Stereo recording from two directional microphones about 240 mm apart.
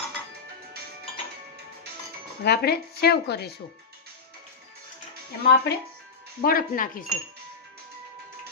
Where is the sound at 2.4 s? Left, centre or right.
Left.